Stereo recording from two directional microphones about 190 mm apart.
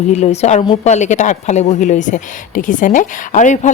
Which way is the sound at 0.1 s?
35° left (ahead or behind).